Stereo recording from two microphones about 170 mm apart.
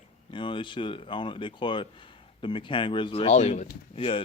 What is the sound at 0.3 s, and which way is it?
Speech, 30° left (ahead or behind).